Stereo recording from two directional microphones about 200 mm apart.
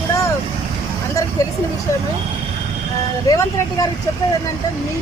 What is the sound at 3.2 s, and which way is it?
Speech, 20° left (ahead or behind).